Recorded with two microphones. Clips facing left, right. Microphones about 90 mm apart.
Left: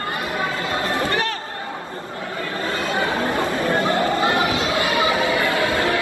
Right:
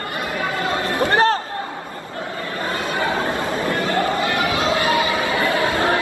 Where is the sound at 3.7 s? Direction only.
25° left (ahead or behind).